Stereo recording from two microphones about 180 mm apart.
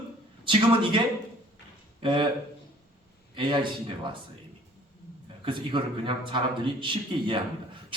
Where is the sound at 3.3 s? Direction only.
25° right (ahead or behind).